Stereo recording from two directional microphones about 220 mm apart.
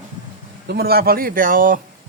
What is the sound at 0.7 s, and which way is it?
Speech, 45° right (ahead or behind).